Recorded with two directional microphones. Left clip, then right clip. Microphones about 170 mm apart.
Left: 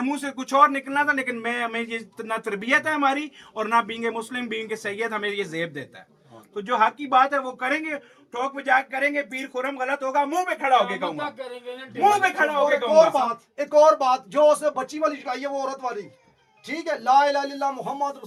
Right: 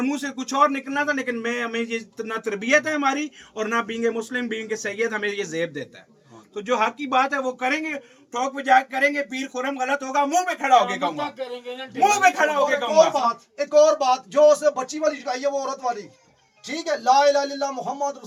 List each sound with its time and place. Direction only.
0.0 s speech: centre (ahead or behind)
6.5 s a man's voice: 30° right (ahead or behind); by 12.5 s 90° right
13.1 s speech: 15° left (ahead or behind); by 18.0 s centre (ahead or behind)